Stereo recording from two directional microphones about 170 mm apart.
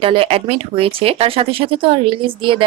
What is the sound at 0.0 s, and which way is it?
Speech, 30° right (ahead or behind).